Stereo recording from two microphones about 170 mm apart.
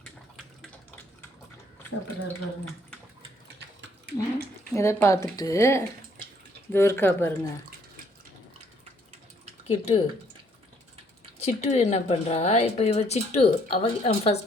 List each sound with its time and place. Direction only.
3.8 s a sound: 90° right
4.7 s speech: 15° left (ahead or behind)
9.6 s speech: 40° left (ahead or behind)
11.3 s speech: 40° left (ahead or behind)